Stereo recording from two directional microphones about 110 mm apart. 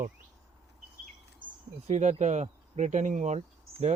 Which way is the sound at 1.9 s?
90° right.